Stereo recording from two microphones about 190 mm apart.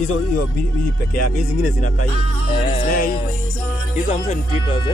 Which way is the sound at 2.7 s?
40° left (ahead or behind).